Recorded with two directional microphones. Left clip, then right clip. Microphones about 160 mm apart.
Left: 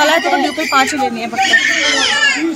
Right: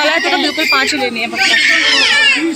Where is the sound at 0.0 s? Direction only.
15° left (ahead or behind).